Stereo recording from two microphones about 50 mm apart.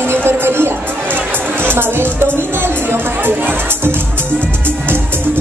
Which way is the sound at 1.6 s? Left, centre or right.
Right.